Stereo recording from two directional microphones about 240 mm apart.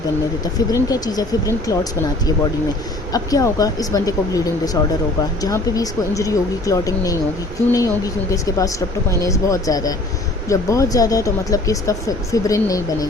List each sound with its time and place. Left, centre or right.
0.4 s speech: centre